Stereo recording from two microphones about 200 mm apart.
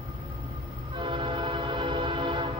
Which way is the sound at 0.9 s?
25° right (ahead or behind).